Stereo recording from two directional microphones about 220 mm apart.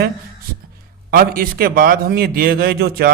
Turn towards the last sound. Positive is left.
turn(degrees=-45)  # may be behind; listen again after turning